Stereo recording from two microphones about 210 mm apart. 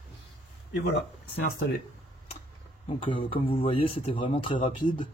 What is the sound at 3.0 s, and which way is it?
A man's voice, 25° left (ahead or behind).